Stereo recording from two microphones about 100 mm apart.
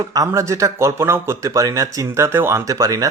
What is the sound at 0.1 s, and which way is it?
Speech, 35° right (ahead or behind).